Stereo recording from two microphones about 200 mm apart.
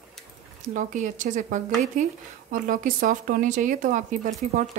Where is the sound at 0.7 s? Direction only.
40° right (ahead or behind).